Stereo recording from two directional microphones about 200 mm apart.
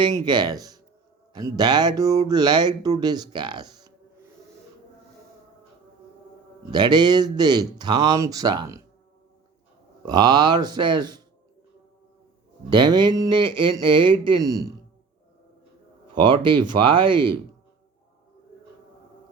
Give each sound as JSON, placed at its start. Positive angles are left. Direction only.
{"t": 0.0, "sound": "speech", "side_deg": -20}
{"t": 6.7, "sound": "speech", "side_deg": -20}
{"t": 10.1, "sound": "speech", "side_deg": -20}
{"t": 12.7, "sound": "speech", "side_deg": -20}
{"t": 16.1, "sound": "speech", "side_deg": -25}